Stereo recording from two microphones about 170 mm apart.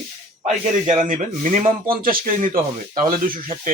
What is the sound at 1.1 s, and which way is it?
Speech, 50° right (ahead or behind).